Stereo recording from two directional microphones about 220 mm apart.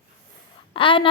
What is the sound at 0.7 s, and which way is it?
Speech, 25° left (ahead or behind).